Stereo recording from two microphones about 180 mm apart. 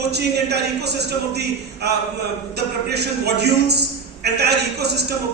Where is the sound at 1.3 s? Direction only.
65° right (ahead or behind).